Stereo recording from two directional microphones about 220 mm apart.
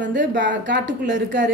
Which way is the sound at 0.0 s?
55° right (ahead or behind).